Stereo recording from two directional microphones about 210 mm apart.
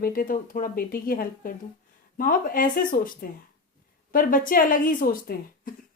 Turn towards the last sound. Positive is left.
turn(degrees=40)  # may be behind; listen again after turning